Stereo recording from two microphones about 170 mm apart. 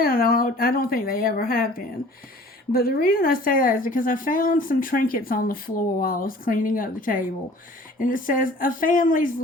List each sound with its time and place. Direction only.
0.0 s speech: 60° left (ahead or behind)